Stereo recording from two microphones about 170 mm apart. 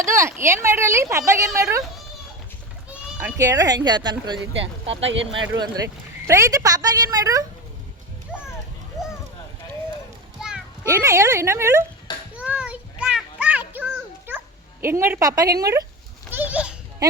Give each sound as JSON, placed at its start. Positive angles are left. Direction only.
{"t": 0.0, "sound": "a woman's voice", "side_deg": -15}
{"t": 3.2, "sound": "a woman's voice", "side_deg": -15}
{"t": 4.9, "sound": "speech", "side_deg": -90}
{"t": 5.5, "sound": "a woman's voice", "side_deg": -20}
{"t": 10.8, "sound": "a woman's voice", "side_deg": -15}
{"t": 12.3, "sound": "music", "side_deg": -10}
{"t": 14.3, "sound": "cat", "side_deg": -15}
{"t": 15.5, "sound": "a woman's voice", "side_deg": -20}
{"t": 16.3, "sound": "goat", "side_deg": -10}